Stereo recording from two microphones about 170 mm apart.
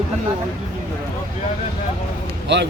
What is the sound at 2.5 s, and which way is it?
Speech, 90° right.